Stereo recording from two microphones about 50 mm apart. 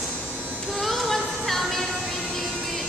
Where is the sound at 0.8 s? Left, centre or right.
Centre.